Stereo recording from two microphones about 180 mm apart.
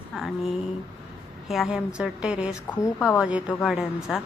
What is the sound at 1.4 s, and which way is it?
A woman's voice, centre (ahead or behind).